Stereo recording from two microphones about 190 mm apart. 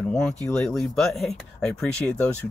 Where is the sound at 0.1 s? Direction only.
5° left (ahead or behind).